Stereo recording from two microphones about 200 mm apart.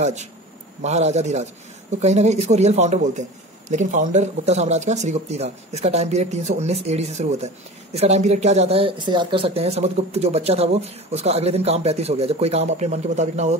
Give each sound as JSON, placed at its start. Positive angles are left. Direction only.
{"t": 0.0, "sound": "a man's voice", "side_deg": -35}